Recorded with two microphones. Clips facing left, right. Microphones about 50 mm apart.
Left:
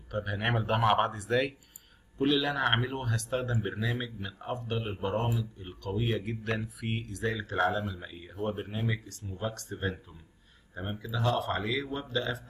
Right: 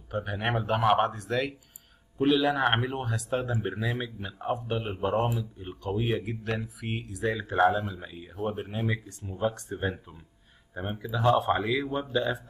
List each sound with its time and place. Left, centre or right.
0.1 s speech: centre
9.2 s speech: centre